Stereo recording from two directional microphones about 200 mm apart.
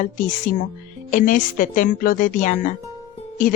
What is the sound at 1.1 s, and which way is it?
A woman's voice, 40° left (ahead or behind).